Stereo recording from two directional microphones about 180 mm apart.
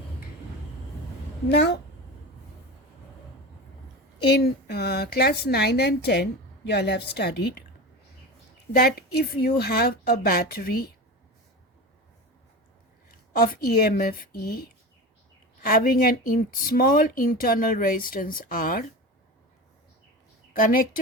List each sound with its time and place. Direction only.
1.5 s a woman's voice: 70° left (ahead or behind)
4.4 s speech: 60° left (ahead or behind)
9.0 s speech: 60° left (ahead or behind)
13.3 s speech: 55° left (ahead or behind)
15.6 s speech: 55° left (ahead or behind)
20.5 s speech: 50° left (ahead or behind)